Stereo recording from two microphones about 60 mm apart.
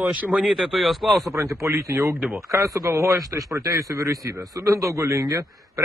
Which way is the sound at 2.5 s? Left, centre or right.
Right.